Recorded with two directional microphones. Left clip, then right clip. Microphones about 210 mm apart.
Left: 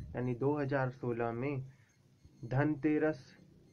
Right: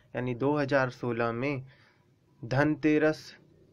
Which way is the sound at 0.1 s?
30° right (ahead or behind).